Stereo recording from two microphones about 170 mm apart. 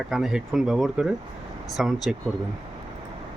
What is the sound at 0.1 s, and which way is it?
Speech, centre (ahead or behind).